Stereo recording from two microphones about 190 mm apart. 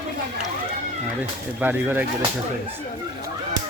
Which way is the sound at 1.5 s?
10° right (ahead or behind).